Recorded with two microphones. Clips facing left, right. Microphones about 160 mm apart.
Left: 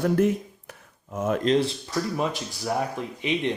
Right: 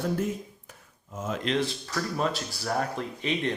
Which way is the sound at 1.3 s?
40° left (ahead or behind).